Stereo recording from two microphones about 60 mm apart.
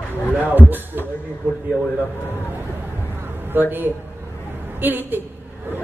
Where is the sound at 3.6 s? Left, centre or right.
Right.